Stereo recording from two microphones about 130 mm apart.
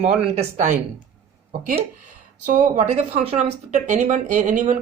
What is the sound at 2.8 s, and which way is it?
Speech, 55° right (ahead or behind).